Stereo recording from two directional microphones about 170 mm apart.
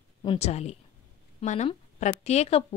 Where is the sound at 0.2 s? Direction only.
35° left (ahead or behind).